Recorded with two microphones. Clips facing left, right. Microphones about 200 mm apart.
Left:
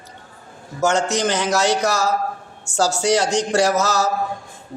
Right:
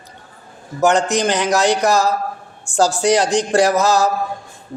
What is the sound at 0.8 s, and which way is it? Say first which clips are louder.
A man's voice: right 3 dB; 15° right (ahead or behind).